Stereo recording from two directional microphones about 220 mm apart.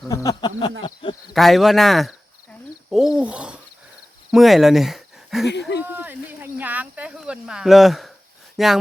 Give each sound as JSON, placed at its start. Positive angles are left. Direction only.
{"t": 0.1, "sound": "a sound", "side_deg": 15}
{"t": 0.8, "sound": "speech", "side_deg": 20}
{"t": 1.3, "sound": "speech", "side_deg": 0}
{"t": 5.5, "sound": "speech", "side_deg": 50}
{"t": 5.8, "sound": "speech", "side_deg": -10}